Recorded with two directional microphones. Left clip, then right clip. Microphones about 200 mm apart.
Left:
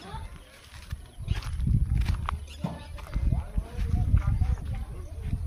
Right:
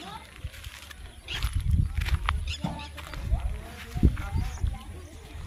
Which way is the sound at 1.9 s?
5° right (ahead or behind).